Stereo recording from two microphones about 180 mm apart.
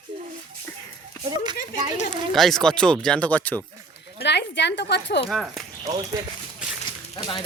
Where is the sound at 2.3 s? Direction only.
Centre (ahead or behind).